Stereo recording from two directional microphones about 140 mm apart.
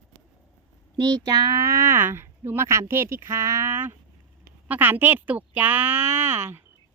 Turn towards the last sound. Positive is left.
turn(degrees=-15)  # may be behind; listen again after turning